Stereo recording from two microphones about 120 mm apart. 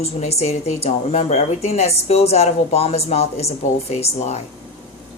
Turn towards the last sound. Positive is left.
turn(degrees=65)  # may be behind; listen again after turning